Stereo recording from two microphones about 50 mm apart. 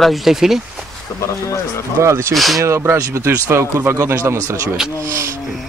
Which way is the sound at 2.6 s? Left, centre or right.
Right.